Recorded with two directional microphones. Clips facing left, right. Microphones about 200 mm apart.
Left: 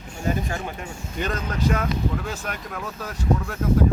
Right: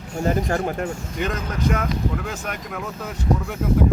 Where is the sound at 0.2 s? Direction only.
45° right (ahead or behind).